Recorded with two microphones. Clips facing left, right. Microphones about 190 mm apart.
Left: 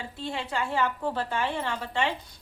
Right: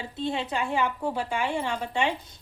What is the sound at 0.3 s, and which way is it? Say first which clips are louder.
A woman's voice: right 2 dB; 20° right (ahead or behind).